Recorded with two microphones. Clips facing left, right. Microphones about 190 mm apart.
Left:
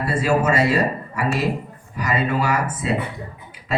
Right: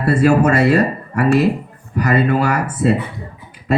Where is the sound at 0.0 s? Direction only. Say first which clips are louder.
Right 6 dB; 60° right (ahead or behind).